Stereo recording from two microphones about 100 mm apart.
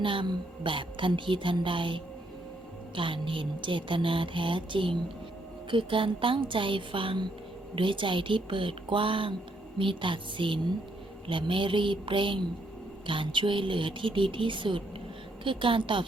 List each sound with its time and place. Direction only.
0.0 s speech: 55° right (ahead or behind)